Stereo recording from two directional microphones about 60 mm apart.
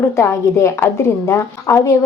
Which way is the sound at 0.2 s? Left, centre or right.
Left.